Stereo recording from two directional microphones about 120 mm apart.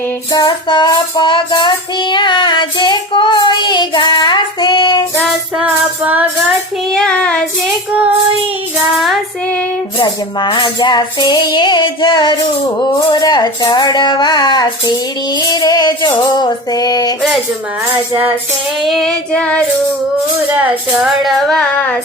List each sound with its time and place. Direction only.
0.3 s child singing: 40° left (ahead or behind)
6.0 s music: 15° right (ahead or behind)
6.9 s child singing: 5° left (ahead or behind)
10.0 s child singing: 40° left (ahead or behind)
17.9 s music: 15° right (ahead or behind)
18.8 s child singing: centre (ahead or behind)
21.0 s child singing: centre (ahead or behind)